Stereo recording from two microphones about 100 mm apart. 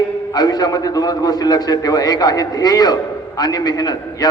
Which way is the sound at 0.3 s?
40° left (ahead or behind).